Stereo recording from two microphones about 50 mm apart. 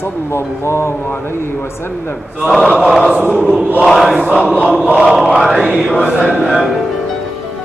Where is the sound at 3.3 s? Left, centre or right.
Centre.